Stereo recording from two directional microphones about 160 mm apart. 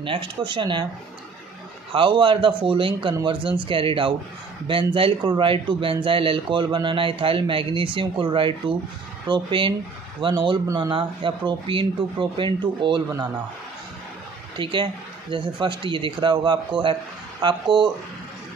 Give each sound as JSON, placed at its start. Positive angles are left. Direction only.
{"t": 0.0, "sound": "speech", "side_deg": -30}
{"t": 1.9, "sound": "speech", "side_deg": -30}
{"t": 14.6, "sound": "speech", "side_deg": -30}